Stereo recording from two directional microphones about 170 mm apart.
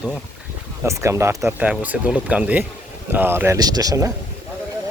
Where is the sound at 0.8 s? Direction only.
15° right (ahead or behind).